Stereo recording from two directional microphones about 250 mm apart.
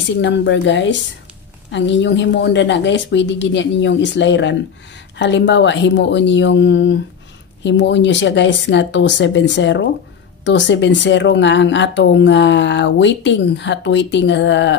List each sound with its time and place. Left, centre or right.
0.2 s speech: left